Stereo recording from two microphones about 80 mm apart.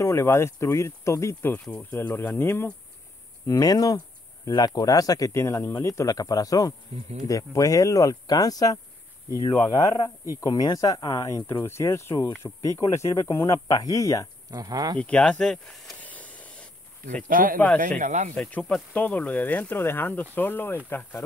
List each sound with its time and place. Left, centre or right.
0.0 s speech: left
1.6 s speech: centre
1.9 s speech: left
3.4 s speech: left
5.3 s speech: left
11.6 s speech: left
14.5 s speech: right
15.0 s speech: centre
16.0 s vehicle: centre
17.2 s speech: centre